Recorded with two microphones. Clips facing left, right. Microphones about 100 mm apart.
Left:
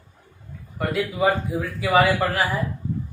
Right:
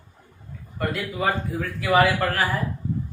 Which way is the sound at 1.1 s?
10° left (ahead or behind).